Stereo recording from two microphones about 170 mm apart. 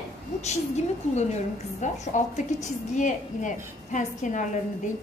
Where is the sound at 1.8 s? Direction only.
45° left (ahead or behind).